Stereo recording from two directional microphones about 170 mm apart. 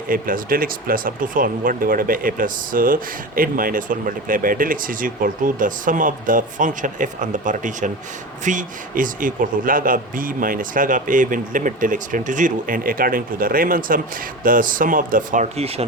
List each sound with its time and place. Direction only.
0.1 s speech: 55° right (ahead or behind); by 15.8 s 35° right (ahead or behind)